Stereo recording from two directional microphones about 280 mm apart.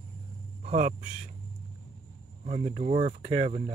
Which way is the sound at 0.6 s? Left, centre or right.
Right.